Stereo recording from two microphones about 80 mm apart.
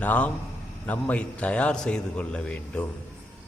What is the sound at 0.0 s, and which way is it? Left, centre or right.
A man's voice, left.